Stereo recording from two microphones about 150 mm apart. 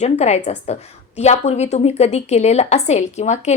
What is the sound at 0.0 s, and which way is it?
A woman's voice, 45° left (ahead or behind).